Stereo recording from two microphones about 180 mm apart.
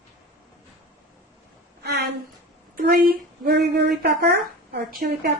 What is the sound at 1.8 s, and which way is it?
Speech, 65° right (ahead or behind).